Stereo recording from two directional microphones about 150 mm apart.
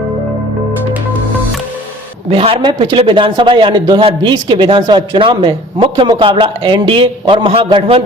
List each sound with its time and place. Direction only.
2.3 s speech: 40° right (ahead or behind)